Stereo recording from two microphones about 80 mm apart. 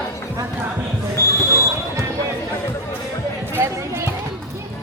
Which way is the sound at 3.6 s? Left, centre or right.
Right.